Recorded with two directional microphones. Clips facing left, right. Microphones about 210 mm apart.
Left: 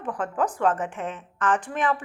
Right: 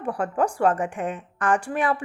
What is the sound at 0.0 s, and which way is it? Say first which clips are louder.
A woman's voice: right 3 dB; 10° right (ahead or behind).